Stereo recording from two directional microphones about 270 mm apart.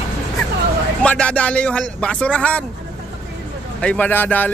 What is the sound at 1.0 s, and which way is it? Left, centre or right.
Speech, centre.